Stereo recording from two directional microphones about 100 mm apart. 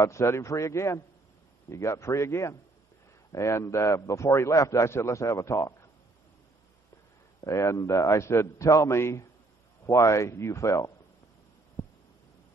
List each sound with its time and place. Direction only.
0.0 s a man's voice: 30° left (ahead or behind)
7.4 s a man's voice: 30° left (ahead or behind)
11.8 s a sound: 15° left (ahead or behind)